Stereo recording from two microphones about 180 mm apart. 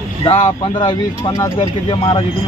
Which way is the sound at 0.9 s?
20° left (ahead or behind).